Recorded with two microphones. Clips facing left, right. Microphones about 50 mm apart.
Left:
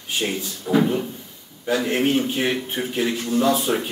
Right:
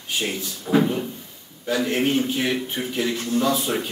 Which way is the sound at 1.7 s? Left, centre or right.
Centre.